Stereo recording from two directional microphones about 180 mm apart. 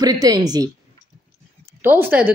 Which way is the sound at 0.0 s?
20° right (ahead or behind).